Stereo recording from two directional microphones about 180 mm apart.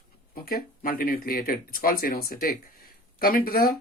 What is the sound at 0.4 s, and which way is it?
Speech, 55° left (ahead or behind).